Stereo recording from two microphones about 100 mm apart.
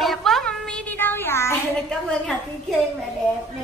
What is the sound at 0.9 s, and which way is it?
Child singing, 20° left (ahead or behind).